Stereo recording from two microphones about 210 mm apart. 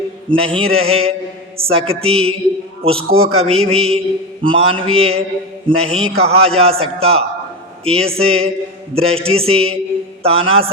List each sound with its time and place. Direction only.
0.3 s a man's voice: 25° right (ahead or behind)